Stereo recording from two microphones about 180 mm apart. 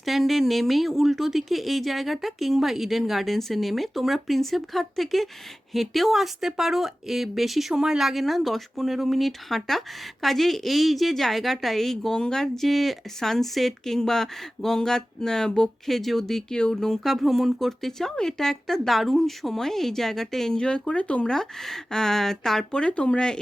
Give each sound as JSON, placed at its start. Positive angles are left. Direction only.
{"t": 0.0, "sound": "speech", "side_deg": 0}